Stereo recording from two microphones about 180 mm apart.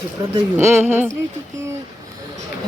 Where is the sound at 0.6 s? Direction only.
10° right (ahead or behind).